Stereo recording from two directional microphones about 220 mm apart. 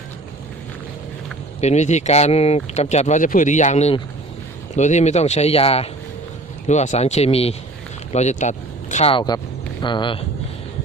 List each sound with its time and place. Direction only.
1.6 s speech: 30° left (ahead or behind)